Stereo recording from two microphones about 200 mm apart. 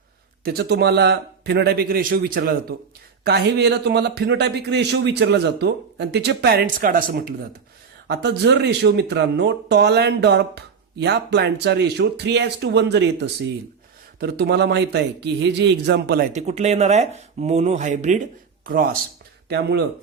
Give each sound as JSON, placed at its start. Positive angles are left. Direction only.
{"t": 0.4, "sound": "speech", "side_deg": -55}
{"t": 6.7, "sound": "speech", "side_deg": -45}
{"t": 8.0, "sound": "speech", "side_deg": -55}
{"t": 16.3, "sound": "speech", "side_deg": -35}
{"t": 19.5, "sound": "speech", "side_deg": -55}